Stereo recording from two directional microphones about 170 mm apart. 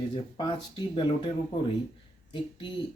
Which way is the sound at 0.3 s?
30° left (ahead or behind).